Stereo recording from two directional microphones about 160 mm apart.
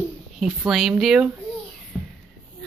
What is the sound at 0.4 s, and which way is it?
Speech, centre (ahead or behind).